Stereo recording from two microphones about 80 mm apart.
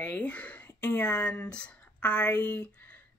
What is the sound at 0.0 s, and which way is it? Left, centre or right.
Speech, centre.